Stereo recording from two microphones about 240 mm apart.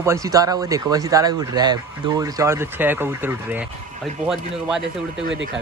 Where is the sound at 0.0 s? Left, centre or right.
Centre.